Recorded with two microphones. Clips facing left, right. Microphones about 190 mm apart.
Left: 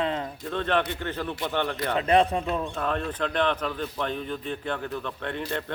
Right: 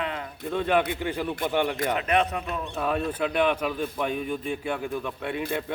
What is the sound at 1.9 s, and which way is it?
Speech, 30° left (ahead or behind).